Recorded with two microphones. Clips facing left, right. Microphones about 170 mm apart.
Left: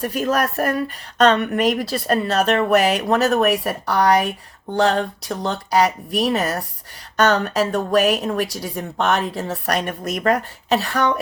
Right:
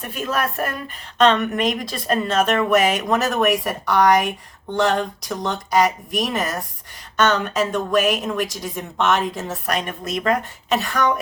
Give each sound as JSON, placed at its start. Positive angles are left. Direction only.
{"t": 0.0, "sound": "speech", "side_deg": 40}
{"t": 5.3, "sound": "speech", "side_deg": 30}